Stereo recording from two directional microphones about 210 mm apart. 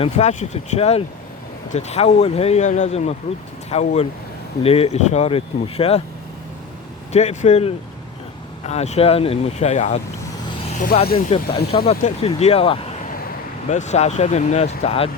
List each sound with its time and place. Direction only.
0.0 s speech: 35° left (ahead or behind)
7.1 s speech: 35° left (ahead or behind)